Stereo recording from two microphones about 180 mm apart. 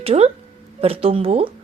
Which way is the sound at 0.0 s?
35° right (ahead or behind).